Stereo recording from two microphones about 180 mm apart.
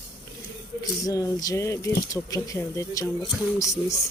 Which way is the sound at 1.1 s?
20° left (ahead or behind).